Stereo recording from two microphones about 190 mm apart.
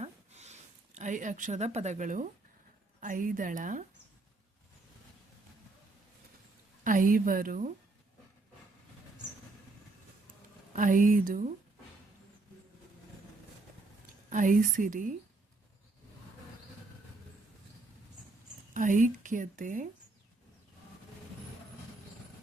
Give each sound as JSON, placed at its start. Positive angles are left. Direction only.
{"t": 0.0, "sound": "a sound", "side_deg": -35}
{"t": 3.0, "sound": "speech", "side_deg": -45}
{"t": 6.8, "sound": "speech", "side_deg": -45}
{"t": 10.8, "sound": "speech", "side_deg": -45}
{"t": 14.3, "sound": "speech", "side_deg": -45}
{"t": 18.7, "sound": "speech", "side_deg": -40}